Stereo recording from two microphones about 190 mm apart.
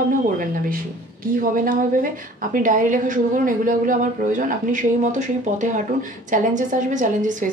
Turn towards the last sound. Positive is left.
turn(degrees=-40)  # may be behind; listen again after turning